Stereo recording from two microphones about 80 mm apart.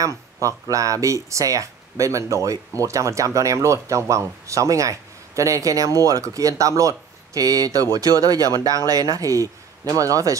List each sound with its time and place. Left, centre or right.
0.0 s speech: right